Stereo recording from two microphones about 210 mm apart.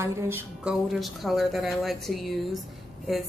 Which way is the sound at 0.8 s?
Centre (ahead or behind).